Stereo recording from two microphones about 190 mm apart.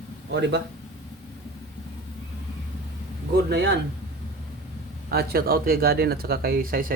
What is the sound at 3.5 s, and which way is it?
Speech, 60° right (ahead or behind).